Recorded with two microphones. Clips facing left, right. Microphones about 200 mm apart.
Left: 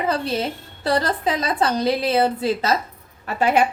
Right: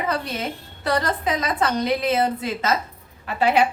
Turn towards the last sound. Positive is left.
turn(degrees=45)  # may be behind; listen again after turning